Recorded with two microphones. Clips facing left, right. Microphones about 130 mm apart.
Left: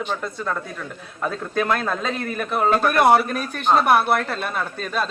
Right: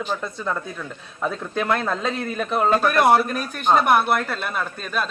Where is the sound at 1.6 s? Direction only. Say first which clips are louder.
Left 1 dB; 20° right (ahead or behind).